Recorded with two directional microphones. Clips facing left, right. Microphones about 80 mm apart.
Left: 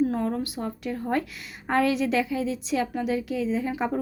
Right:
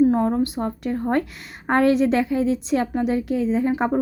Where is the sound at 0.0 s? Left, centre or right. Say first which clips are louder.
Right 7 dB; right.